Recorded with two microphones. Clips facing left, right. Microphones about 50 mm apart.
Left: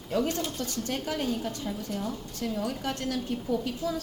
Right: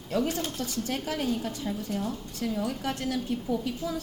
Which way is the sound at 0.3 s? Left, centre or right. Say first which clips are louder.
Even; centre.